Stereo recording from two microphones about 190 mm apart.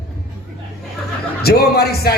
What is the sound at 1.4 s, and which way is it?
Speech, 55° left (ahead or behind).